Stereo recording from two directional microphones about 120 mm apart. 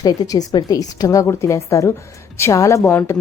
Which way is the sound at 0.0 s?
30° left (ahead or behind).